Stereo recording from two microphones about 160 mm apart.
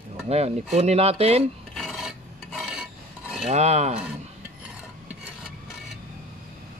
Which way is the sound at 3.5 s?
45° right (ahead or behind).